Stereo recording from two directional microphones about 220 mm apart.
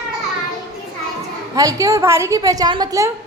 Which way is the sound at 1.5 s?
15° right (ahead or behind).